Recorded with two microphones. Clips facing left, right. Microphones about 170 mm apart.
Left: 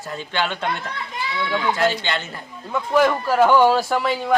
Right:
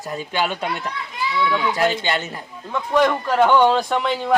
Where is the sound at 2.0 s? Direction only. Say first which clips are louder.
Right 3 dB; 10° right (ahead or behind).